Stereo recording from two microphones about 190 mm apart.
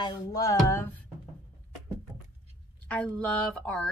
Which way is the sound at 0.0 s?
20° left (ahead or behind).